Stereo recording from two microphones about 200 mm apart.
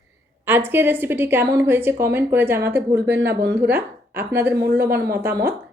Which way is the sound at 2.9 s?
55° right (ahead or behind).